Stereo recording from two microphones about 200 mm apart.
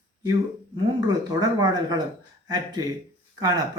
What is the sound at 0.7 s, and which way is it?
Speech, 20° right (ahead or behind).